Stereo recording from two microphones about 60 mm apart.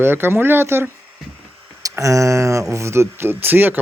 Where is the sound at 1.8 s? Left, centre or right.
Right.